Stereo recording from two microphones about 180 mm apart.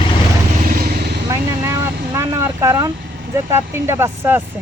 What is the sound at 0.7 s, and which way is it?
Vehicle, 55° right (ahead or behind).